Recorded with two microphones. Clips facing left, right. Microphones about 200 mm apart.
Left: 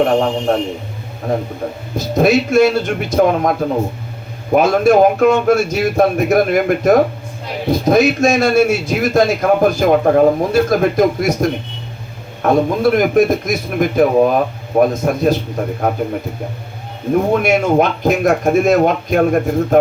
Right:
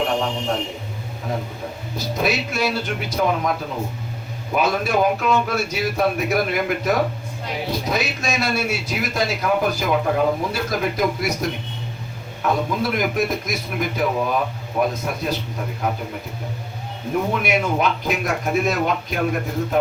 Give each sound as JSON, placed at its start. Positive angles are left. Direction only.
{"t": 0.0, "sound": "a sound", "side_deg": 50}
{"t": 2.1, "sound": "a man's voice", "side_deg": 50}
{"t": 17.3, "sound": "a man's voice", "side_deg": 45}